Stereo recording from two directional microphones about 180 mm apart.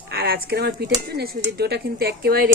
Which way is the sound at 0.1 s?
60° right (ahead or behind).